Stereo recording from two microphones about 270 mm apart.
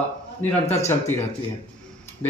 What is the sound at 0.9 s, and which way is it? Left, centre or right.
Speech, centre.